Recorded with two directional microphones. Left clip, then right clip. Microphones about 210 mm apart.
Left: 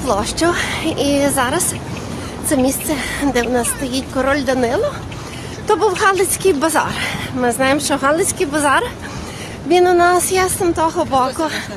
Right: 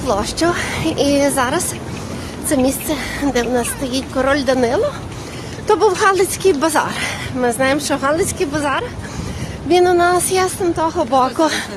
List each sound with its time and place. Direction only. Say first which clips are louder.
0.0 s a woman's voice: even; centre (ahead or behind)
11.3 s speech: right 4 dB; 30° right (ahead or behind)